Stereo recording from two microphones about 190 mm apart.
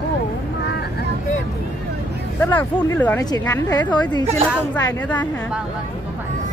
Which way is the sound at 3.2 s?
20° left (ahead or behind).